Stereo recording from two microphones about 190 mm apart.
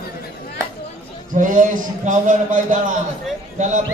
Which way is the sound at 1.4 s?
45° right (ahead or behind).